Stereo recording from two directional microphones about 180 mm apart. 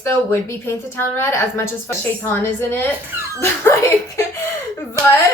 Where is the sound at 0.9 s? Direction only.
15° left (ahead or behind).